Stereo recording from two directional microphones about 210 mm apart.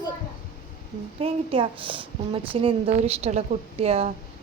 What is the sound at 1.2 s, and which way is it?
A woman's voice, 25° right (ahead or behind).